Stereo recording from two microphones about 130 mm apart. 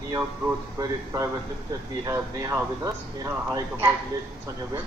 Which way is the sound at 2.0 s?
25° right (ahead or behind).